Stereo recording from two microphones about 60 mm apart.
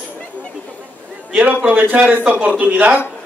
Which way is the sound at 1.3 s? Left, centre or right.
Right.